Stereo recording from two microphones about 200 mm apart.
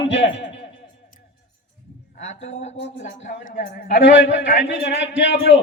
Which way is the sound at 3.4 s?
55° left (ahead or behind).